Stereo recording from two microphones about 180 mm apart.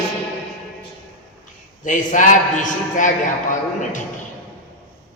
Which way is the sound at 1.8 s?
45° left (ahead or behind).